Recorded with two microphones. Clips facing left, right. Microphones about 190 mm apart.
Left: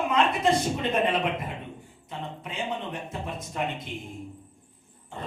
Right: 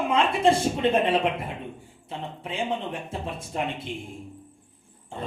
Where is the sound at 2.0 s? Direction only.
30° right (ahead or behind).